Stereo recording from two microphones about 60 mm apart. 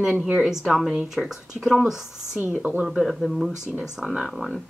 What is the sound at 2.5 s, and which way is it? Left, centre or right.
Speech, centre.